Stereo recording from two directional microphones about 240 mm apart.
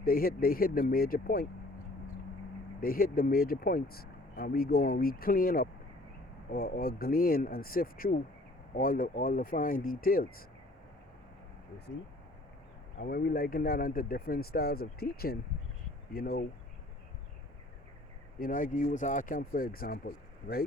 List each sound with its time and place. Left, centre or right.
0.0 s speech: left
2.8 s speech: left
13.0 s speech: left
18.3 s speech: left